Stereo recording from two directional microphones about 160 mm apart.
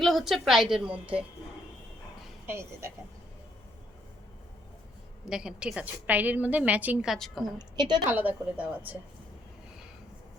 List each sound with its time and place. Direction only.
0.0 s a woman's voice: centre (ahead or behind)
2.5 s a woman's voice: 15° right (ahead or behind)
5.3 s a woman's voice: 5° right (ahead or behind)
7.8 s a woman's voice: 25° right (ahead or behind)
8.0 s a woman's voice: 10° right (ahead or behind)